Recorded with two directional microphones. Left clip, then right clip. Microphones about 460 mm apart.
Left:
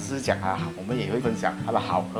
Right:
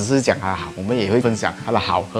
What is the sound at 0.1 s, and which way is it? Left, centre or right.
Speech, right.